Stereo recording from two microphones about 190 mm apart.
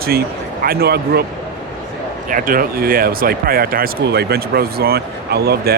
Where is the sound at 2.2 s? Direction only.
45° right (ahead or behind).